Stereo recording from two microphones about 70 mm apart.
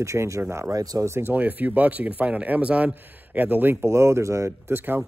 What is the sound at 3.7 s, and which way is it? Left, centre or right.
Speech, right.